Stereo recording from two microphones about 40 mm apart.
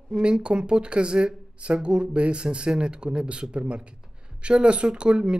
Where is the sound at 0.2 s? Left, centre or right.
Right.